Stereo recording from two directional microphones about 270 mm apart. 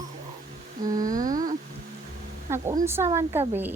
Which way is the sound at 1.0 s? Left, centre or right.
Right.